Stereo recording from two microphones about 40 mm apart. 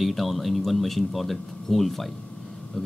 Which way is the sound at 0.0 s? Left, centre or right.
Centre.